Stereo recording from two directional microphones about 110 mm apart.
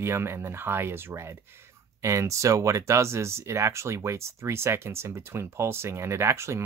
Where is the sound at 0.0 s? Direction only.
25° right (ahead or behind).